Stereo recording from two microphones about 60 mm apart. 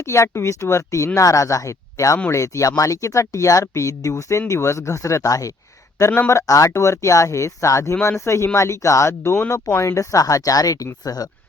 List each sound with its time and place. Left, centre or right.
0.0 s speech: left
6.1 s speech: left
6.3 s speech: left
6.7 s speech: left